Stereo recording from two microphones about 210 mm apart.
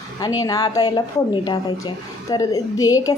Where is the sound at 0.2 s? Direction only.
15° left (ahead or behind).